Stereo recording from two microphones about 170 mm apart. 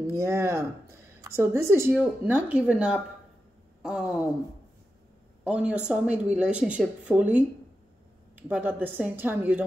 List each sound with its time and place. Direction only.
0.1 s speech: 15° right (ahead or behind)
5.5 s speech: 5° right (ahead or behind)